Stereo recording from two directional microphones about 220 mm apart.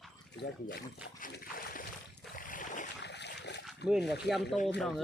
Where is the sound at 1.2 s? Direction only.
40° left (ahead or behind).